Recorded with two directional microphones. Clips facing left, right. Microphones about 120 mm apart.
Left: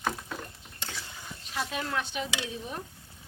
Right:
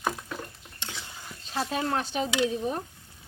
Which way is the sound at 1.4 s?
35° right (ahead or behind).